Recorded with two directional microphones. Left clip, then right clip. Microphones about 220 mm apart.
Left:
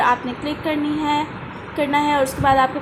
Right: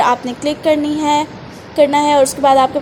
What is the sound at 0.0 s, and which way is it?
A woman's voice, 30° right (ahead or behind).